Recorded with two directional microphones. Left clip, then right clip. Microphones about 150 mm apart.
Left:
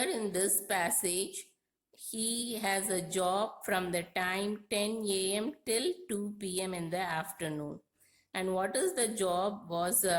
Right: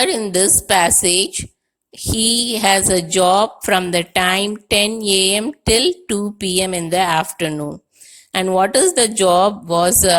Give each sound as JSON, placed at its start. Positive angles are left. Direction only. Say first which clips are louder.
{"t": 0.2, "sound": "speech", "louder": "right 16 dB", "side_deg": -40}